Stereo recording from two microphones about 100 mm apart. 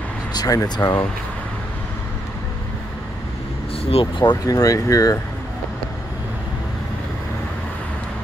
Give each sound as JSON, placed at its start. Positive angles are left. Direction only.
{"t": 0.3, "sound": "speech", "side_deg": 45}
{"t": 3.8, "sound": "speech", "side_deg": 80}
{"t": 4.2, "sound": "speech", "side_deg": 45}